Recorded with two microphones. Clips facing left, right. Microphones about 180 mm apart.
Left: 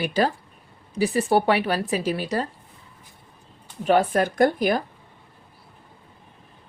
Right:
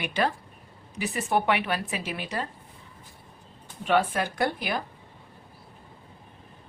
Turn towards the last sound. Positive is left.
turn(degrees=45)  # may be behind; listen again after turning